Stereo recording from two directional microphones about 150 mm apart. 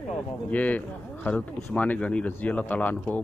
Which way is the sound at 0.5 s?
10° left (ahead or behind).